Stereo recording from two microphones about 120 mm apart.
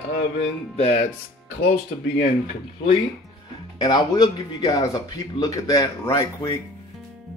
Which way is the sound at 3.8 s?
35° left (ahead or behind).